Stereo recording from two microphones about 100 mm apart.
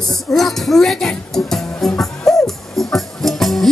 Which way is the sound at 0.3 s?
Centre (ahead or behind).